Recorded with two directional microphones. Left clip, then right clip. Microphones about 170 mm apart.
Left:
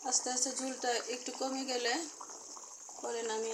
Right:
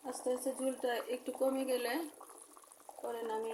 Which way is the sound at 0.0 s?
10° right (ahead or behind).